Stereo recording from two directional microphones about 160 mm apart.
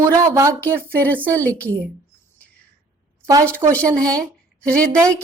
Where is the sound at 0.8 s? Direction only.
10° left (ahead or behind).